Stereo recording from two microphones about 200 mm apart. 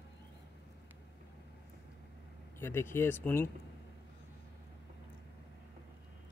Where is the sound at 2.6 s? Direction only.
10° left (ahead or behind).